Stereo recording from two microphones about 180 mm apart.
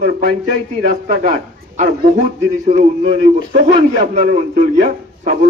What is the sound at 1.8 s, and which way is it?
A man's voice, 45° right (ahead or behind).